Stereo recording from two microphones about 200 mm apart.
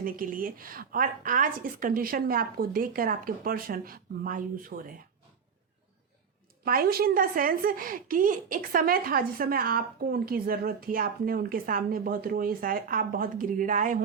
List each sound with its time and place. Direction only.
0.0 s a woman's voice: 45° right (ahead or behind)
6.7 s a woman's voice: 45° right (ahead or behind)